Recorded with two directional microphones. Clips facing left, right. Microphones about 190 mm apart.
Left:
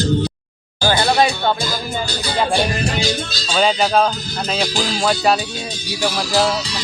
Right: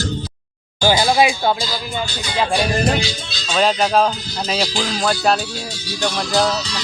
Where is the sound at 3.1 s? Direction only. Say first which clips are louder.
Left 7 dB; 55° left (ahead or behind).